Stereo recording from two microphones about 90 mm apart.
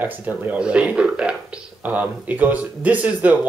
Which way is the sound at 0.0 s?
20° right (ahead or behind).